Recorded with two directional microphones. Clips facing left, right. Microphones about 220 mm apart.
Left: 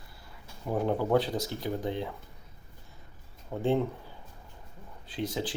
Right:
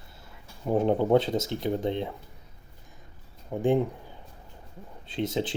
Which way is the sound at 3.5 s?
15° right (ahead or behind).